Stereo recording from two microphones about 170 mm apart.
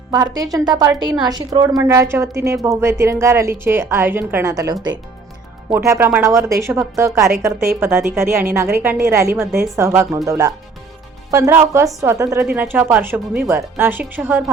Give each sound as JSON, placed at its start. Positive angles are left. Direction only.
{"t": 0.1, "sound": "a woman's voice", "side_deg": -20}